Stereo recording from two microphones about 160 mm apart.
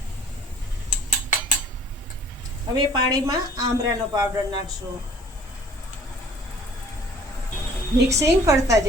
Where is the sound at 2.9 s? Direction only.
25° right (ahead or behind).